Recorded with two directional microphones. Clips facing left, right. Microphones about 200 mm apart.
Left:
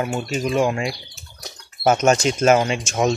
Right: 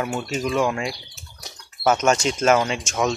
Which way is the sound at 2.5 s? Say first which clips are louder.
Left 2 dB; 15° left (ahead or behind).